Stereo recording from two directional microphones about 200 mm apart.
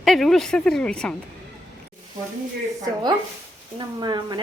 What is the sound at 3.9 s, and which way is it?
Speech, 20° right (ahead or behind).